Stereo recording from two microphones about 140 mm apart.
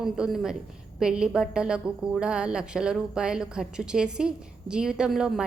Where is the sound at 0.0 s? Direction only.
5° right (ahead or behind).